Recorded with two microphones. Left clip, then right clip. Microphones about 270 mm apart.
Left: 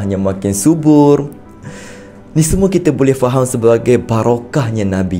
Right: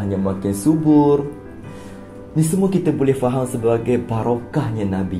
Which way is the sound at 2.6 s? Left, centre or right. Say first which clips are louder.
Left 7 dB; left.